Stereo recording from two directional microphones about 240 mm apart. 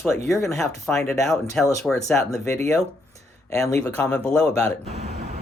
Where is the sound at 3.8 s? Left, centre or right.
Centre.